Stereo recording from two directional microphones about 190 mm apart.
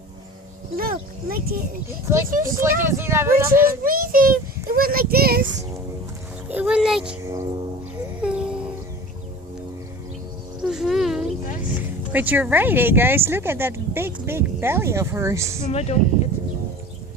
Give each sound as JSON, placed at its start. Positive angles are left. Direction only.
{"t": 0.8, "sound": "a child's voice", "side_deg": -50}
{"t": 2.6, "sound": "speech", "side_deg": -15}
{"t": 3.8, "sound": "a child's voice", "side_deg": -50}
{"t": 6.5, "sound": "a child's voice", "side_deg": -5}
{"t": 8.2, "sound": "a sound", "side_deg": -5}
{"t": 10.6, "sound": "a sound", "side_deg": 0}
{"t": 11.7, "sound": "speech", "side_deg": -10}
{"t": 15.6, "sound": "speech", "side_deg": 35}